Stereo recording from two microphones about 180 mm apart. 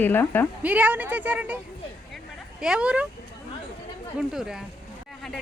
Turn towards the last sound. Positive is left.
turn(degrees=0)  # may be behind; listen again after turning